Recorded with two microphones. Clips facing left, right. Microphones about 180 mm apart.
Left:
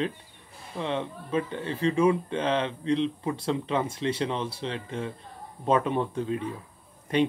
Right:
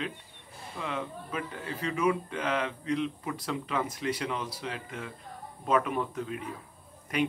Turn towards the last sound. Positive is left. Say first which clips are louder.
# left 5 dB
turn(degrees=30)  # may be behind; listen again after turning